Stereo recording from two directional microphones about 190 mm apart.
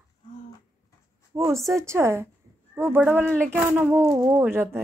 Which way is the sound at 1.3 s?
15° right (ahead or behind).